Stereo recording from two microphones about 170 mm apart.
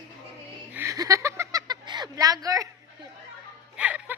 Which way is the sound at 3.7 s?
10° right (ahead or behind).